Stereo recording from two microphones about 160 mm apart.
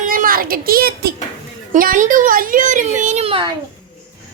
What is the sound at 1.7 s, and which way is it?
A child's voice, 55° right (ahead or behind).